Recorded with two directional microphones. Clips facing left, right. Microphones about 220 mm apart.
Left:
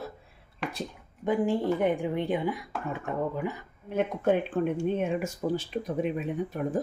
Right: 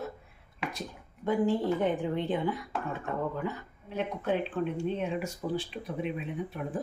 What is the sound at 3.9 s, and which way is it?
Speech, 50° left (ahead or behind).